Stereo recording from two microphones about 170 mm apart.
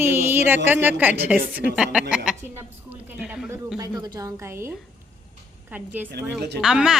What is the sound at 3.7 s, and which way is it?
A woman's voice, 20° right (ahead or behind).